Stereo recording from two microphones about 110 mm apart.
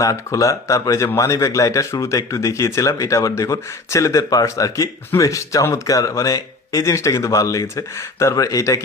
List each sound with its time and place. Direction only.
0.0 s speech: 30° left (ahead or behind)